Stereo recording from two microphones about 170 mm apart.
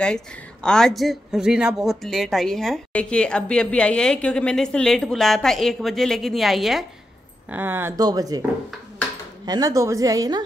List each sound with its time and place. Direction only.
0.0 s speech: 5° left (ahead or behind)
7.4 s speech: 10° right (ahead or behind)
9.5 s speech: 20° right (ahead or behind)